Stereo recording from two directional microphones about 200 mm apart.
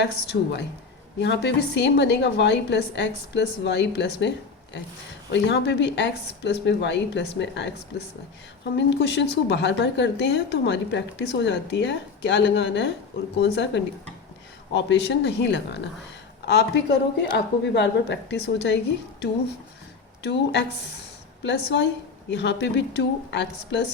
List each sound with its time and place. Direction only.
0.0 s speech: 60° left (ahead or behind)
8.7 s speech: 60° left (ahead or behind)
20.2 s speech: 60° left (ahead or behind)